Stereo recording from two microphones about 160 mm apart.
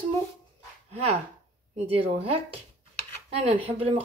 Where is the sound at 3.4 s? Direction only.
40° right (ahead or behind).